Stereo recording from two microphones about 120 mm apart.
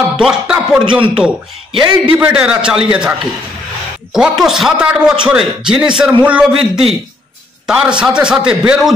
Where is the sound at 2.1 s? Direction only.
10° right (ahead or behind).